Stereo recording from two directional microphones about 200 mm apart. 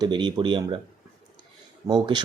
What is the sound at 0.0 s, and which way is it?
Speech, 20° right (ahead or behind).